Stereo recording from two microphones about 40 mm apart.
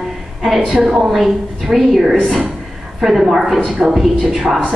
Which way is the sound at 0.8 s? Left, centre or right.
Centre.